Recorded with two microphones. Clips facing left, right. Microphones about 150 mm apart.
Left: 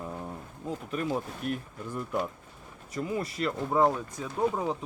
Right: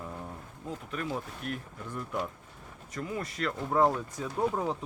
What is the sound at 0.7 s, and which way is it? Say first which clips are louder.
Speech: left 4 dB; 35° left (ahead or behind).